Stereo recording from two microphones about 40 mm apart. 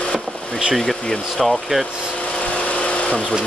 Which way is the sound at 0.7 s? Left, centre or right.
Centre.